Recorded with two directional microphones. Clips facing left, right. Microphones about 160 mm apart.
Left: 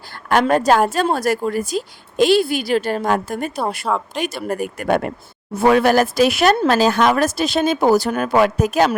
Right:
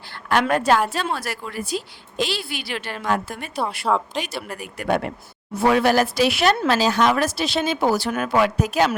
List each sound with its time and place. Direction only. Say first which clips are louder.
0.1 s a woman's voice: left 4 dB; 45° left (ahead or behind)